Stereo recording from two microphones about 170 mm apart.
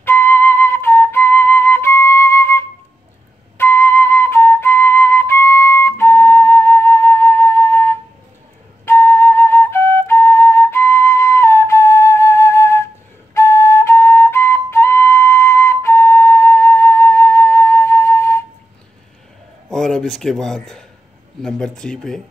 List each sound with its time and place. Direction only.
0.0 s flute: 15° left (ahead or behind)
19.7 s speech: 5° left (ahead or behind)